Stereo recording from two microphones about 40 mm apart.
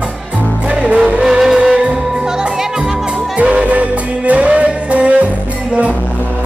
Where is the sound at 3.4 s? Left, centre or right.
Right.